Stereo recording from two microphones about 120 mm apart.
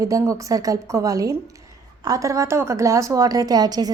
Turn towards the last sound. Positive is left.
turn(degrees=-35)  # may be behind; listen again after turning